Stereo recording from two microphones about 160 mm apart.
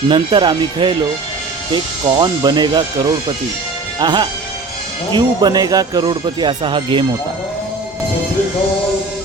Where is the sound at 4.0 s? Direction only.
25° right (ahead or behind).